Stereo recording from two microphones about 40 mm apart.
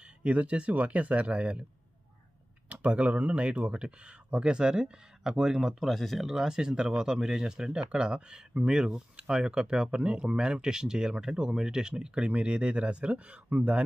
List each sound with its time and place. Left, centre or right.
0.0 s speech: right
2.7 s speech: right; by 5.9 s centre
5.9 s speech: centre
6.2 s speech: centre; by 13.8 s right